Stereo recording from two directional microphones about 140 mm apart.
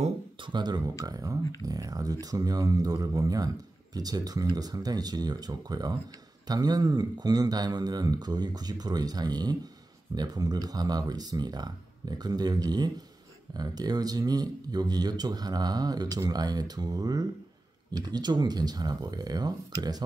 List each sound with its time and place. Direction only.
0.4 s speech: 35° right (ahead or behind)